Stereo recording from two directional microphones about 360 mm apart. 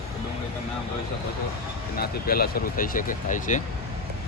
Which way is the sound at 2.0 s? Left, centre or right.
Left.